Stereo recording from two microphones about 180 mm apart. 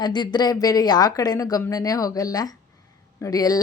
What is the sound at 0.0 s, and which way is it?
Speech, 25° left (ahead or behind).